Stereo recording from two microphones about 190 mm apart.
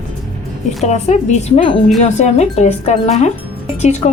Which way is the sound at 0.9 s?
35° left (ahead or behind).